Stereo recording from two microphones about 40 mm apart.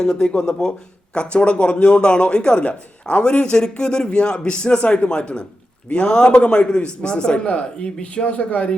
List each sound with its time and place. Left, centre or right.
0.0 s a man's voice: centre